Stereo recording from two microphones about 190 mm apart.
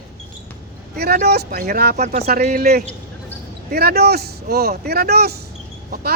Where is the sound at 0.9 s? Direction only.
55° right (ahead or behind).